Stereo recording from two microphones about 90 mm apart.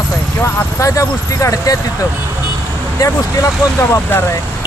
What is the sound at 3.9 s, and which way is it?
Speech, 25° left (ahead or behind).